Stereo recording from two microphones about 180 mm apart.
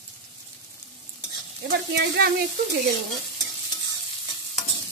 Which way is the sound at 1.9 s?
65° right (ahead or behind).